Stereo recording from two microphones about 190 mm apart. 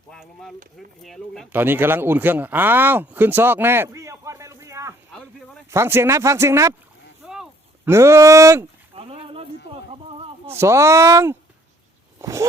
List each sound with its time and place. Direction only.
0.1 s speech: 5° left (ahead or behind)
1.5 s speech: 10° right (ahead or behind)
5.1 s a sound: 5° left (ahead or behind)
5.7 s speech: 15° right (ahead or behind)
7.2 s a sound: 5° right (ahead or behind)
7.9 s speech: 15° right (ahead or behind)
9.0 s a sound: 30° right (ahead or behind)
9.9 s speech: 30° right (ahead or behind)
10.4 s speech: 15° right (ahead or behind)